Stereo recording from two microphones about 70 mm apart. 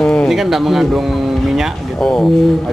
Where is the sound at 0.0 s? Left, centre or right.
Centre.